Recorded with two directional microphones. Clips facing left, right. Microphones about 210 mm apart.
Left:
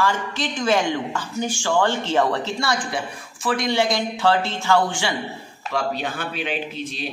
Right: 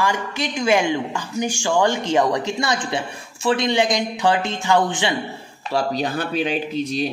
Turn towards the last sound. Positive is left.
turn(degrees=-40)  # may be behind; listen again after turning